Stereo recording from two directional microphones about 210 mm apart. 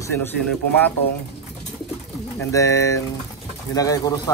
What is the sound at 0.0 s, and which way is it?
Speech, 10° left (ahead or behind).